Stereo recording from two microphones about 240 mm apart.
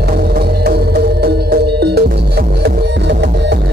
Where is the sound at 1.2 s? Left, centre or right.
Right.